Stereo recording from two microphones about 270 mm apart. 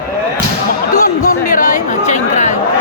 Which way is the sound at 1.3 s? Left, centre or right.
Left.